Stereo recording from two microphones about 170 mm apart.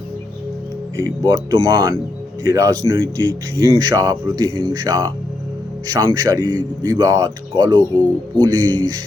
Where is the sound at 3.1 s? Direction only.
90° right.